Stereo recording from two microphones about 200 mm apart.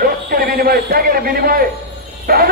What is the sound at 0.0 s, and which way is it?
A man's voice, 45° right (ahead or behind).